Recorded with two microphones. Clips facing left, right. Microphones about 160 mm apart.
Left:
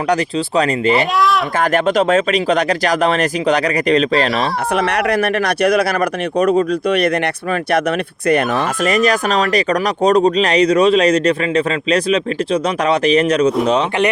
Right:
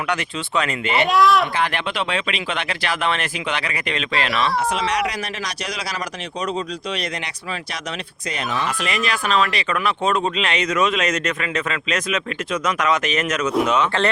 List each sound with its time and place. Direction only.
0.1 s speech: 35° left (ahead or behind)
0.9 s speech: centre (ahead or behind)
1.5 s speech: 45° left (ahead or behind)
4.7 s speech: 60° left (ahead or behind); by 13.5 s 35° left (ahead or behind)